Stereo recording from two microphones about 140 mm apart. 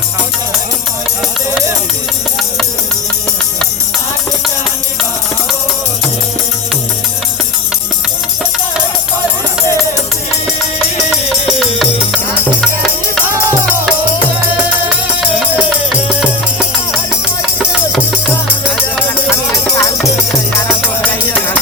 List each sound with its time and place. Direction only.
11.6 s music: centre (ahead or behind)
15.0 s music: 5° right (ahead or behind)
19.3 s music: 20° left (ahead or behind)